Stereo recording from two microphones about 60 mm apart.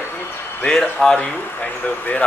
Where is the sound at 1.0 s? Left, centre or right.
Centre.